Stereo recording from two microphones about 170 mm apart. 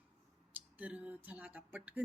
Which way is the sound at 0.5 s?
10° right (ahead or behind).